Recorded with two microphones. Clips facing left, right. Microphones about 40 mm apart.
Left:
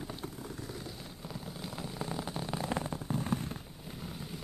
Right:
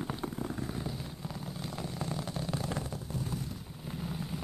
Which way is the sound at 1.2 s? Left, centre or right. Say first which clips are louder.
Even; centre.